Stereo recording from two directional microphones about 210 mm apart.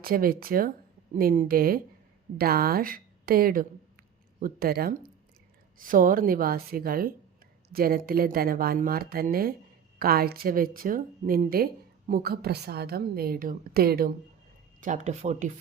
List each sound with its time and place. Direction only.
0.0 s speech: 45° right (ahead or behind)
14.8 s speech: 35° right (ahead or behind)